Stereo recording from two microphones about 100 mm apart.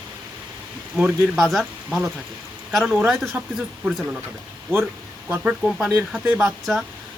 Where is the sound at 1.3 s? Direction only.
Centre (ahead or behind).